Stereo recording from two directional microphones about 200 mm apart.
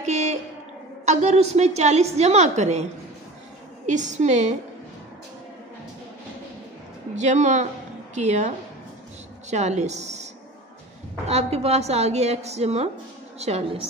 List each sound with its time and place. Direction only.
0.0 s music: 35° right (ahead or behind)
1.0 s a woman's voice: 35° right (ahead or behind)
7.2 s a woman's voice: 35° right (ahead or behind)
11.2 s a woman's voice: 30° right (ahead or behind)